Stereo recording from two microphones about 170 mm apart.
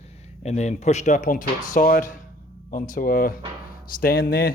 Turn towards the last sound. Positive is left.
turn(degrees=65)  # may be behind; listen again after turning